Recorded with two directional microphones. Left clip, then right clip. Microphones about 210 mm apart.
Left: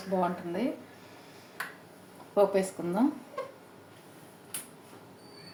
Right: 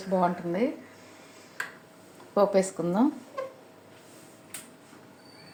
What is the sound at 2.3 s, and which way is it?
Speech, 40° right (ahead or behind).